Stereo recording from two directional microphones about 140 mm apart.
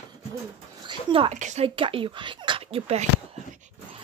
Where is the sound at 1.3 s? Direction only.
60° right (ahead or behind).